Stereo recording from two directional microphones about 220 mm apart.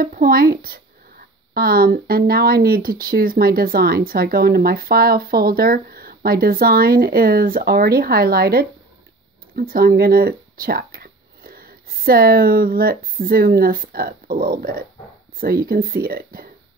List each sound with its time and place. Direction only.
0.0 s speech: 40° right (ahead or behind)